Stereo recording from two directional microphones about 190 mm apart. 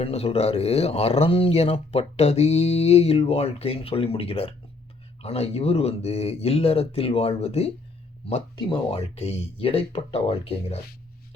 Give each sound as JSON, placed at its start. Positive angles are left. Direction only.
{"t": 0.0, "sound": "speech", "side_deg": 35}